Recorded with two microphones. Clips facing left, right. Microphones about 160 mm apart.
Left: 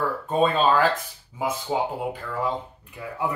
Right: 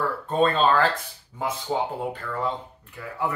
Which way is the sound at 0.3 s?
5° left (ahead or behind).